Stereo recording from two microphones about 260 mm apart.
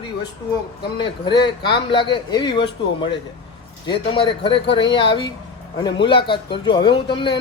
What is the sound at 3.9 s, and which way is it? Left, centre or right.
Speech, centre.